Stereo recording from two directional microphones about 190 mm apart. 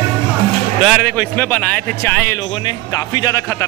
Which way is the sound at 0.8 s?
Centre (ahead or behind).